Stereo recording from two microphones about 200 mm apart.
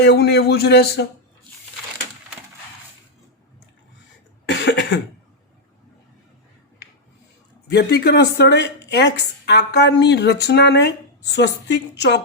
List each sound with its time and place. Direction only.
0.0 s a man's voice: 55° left (ahead or behind)
4.4 s cough: 65° left (ahead or behind)
7.7 s a woman's voice: 55° left (ahead or behind)